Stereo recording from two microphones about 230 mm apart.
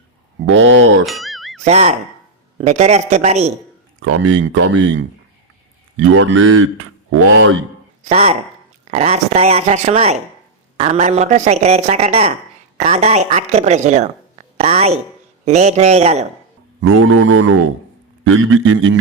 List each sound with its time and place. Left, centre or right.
0.4 s speech: right
1.0 s music: centre
1.6 s speech: right
4.0 s speech: right
8.0 s a woman's voice: right
16.8 s speech: right